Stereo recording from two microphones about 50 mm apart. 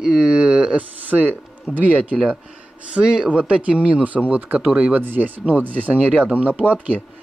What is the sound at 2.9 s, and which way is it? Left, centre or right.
Speech, centre.